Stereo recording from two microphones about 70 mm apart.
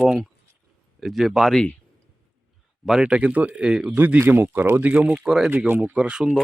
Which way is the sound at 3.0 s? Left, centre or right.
Centre.